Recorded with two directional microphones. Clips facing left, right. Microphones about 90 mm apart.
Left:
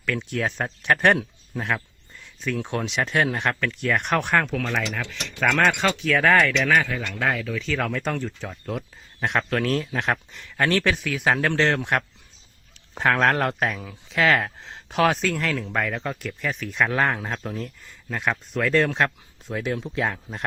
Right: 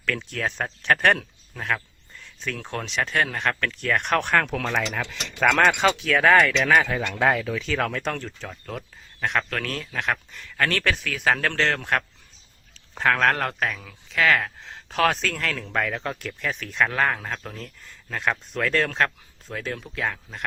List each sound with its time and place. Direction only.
0.0 s speech: 15° left (ahead or behind)
2.2 s a sound: 5° left (ahead or behind)
2.6 s speech: 10° left (ahead or behind)
3.5 s speech: 5° left (ahead or behind)
6.8 s speech: 20° right (ahead or behind)
7.6 s speech: 5° right (ahead or behind)
9.5 s speech: 25° left (ahead or behind)
15.1 s speech: 5° left (ahead or behind)
16.9 s speech: 20° left (ahead or behind)
19.7 s speech: 25° left (ahead or behind)